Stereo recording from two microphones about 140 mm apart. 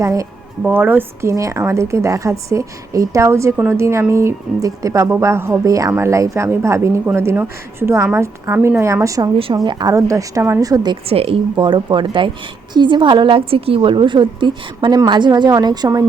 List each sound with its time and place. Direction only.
0.0 s a woman's voice: 25° right (ahead or behind)
0.6 s a woman's voice: 10° right (ahead or behind)
11.1 s a woman's voice: 45° right (ahead or behind); by 16.0 s 25° right (ahead or behind)